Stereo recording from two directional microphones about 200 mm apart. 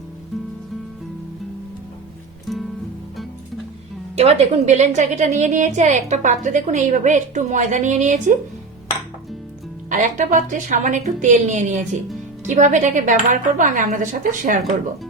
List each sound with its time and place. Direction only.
2.5 s music: centre (ahead or behind)
4.2 s a woman's voice: 35° right (ahead or behind)
9.9 s a woman's voice: 40° right (ahead or behind)